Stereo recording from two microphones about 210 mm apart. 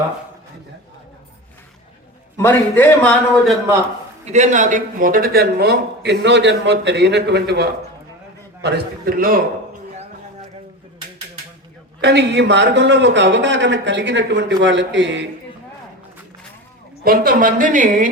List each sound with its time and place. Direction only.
2.4 s a man's voice: 10° left (ahead or behind)
4.3 s speech: 35° right (ahead or behind)
11.9 s a man's voice: 55° right (ahead or behind)
17.0 s a woman's voice: 45° right (ahead or behind)